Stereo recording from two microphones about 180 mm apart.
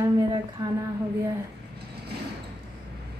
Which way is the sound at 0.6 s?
20° right (ahead or behind).